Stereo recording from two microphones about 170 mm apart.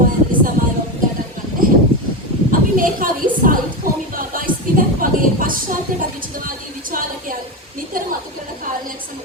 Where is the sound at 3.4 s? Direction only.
55° right (ahead or behind).